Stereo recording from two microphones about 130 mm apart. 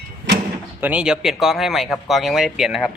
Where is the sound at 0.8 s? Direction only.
10° right (ahead or behind).